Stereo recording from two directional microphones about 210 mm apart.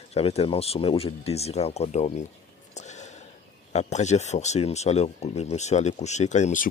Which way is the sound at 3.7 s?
35° left (ahead or behind).